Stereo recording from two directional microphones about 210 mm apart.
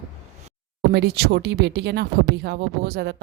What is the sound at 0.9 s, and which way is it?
Speech, 50° right (ahead or behind).